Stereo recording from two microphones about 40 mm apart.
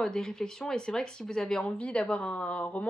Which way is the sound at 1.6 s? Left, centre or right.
Left.